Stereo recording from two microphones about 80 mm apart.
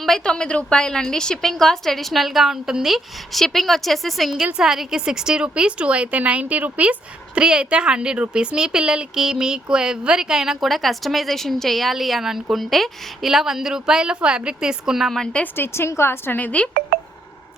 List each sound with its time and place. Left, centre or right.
0.0 s a woman's voice: centre
15.5 s a woman's voice: left